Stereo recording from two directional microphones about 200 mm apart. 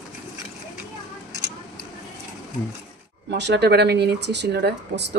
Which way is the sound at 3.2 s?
55° right (ahead or behind).